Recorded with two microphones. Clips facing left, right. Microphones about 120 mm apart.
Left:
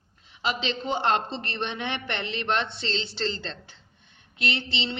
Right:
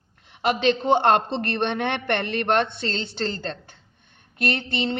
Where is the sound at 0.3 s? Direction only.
60° right (ahead or behind).